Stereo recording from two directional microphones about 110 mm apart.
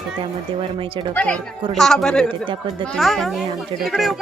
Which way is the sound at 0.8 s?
50° right (ahead or behind).